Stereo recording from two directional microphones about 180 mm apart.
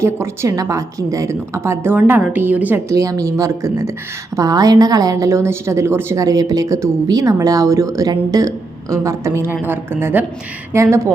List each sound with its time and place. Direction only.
0.0 s a woman's voice: 15° right (ahead or behind)